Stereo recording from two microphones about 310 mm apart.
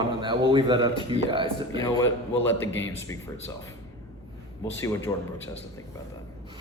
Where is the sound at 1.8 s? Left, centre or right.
Centre.